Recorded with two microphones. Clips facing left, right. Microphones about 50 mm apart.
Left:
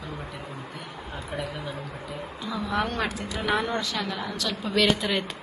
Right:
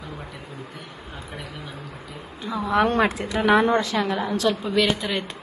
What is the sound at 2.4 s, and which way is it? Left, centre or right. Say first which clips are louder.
A woman's voice: right 7 dB; right.